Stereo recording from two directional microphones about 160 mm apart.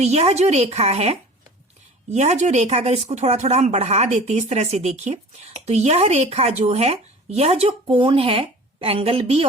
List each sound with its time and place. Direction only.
0.0 s speech: 40° right (ahead or behind)